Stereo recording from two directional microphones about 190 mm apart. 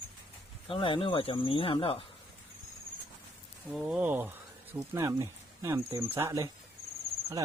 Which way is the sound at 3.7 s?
5° right (ahead or behind).